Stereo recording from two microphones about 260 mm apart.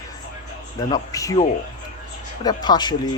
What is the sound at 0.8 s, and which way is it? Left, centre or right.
Speech, centre.